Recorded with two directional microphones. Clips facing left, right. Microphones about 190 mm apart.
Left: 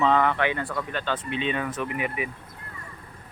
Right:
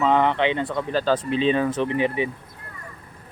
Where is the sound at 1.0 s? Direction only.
35° right (ahead or behind).